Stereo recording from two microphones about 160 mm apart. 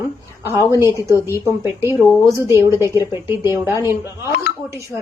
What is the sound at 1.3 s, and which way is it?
Speech, 15° right (ahead or behind).